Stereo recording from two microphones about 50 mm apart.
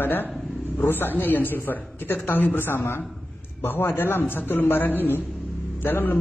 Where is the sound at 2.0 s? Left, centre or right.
Left.